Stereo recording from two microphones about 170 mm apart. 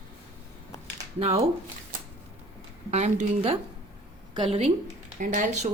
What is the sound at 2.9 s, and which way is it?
A woman's voice, 40° right (ahead or behind).